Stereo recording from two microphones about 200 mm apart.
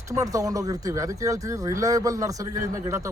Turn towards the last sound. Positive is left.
turn(degrees=-15)  # may be behind; listen again after turning